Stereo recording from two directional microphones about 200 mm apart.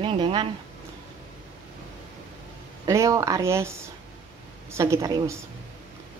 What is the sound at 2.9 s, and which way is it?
Speech, 15° right (ahead or behind).